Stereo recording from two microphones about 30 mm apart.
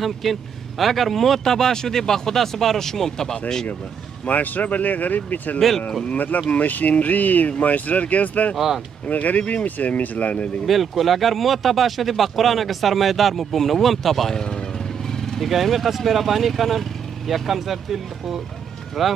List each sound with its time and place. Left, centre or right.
0.0 s speech: centre
1.4 s speech: centre
4.3 s speech: left
8.5 s speech: centre
9.1 s speech: left
10.6 s speech: centre
14.3 s speech: left
15.0 s vehicle: centre
15.4 s speech: centre